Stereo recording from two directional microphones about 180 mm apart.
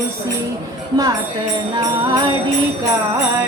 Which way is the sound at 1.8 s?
25° right (ahead or behind).